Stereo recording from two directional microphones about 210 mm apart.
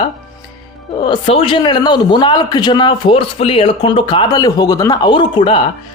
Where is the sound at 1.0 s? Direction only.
25° left (ahead or behind).